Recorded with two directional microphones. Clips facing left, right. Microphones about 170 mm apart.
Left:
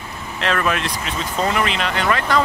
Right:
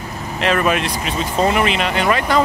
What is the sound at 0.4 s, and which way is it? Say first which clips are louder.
Speech: right 4 dB; 15° right (ahead or behind).